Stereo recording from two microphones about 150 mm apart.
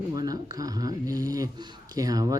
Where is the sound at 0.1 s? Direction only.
25° right (ahead or behind).